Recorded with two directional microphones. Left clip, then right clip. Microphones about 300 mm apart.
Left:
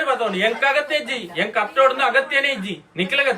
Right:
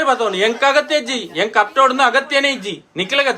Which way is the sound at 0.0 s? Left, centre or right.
Centre.